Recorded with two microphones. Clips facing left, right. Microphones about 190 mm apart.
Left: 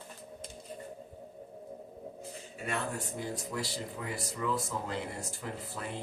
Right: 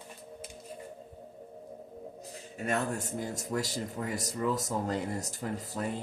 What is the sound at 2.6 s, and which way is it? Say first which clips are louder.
Speech: right 4 dB; 45° right (ahead or behind).